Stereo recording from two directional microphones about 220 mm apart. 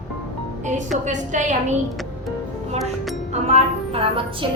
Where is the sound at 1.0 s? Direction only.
35° right (ahead or behind).